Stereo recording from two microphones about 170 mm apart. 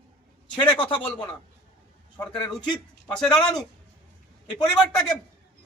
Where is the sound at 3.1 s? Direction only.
5° left (ahead or behind).